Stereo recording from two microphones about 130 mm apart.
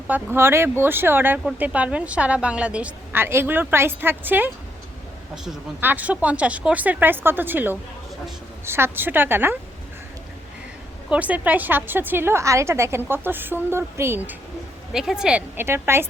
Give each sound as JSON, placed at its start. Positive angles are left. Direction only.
{"t": 0.1, "sound": "a woman's voice", "side_deg": -15}
{"t": 5.8, "sound": "a woman's voice", "side_deg": -10}
{"t": 11.1, "sound": "a woman's voice", "side_deg": -10}
{"t": 14.9, "sound": "a woman's voice", "side_deg": -5}